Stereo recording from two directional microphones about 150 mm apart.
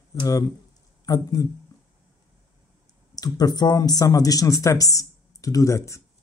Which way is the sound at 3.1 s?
25° left (ahead or behind).